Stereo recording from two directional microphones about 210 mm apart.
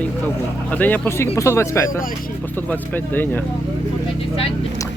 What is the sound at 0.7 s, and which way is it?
Speech, 10° left (ahead or behind).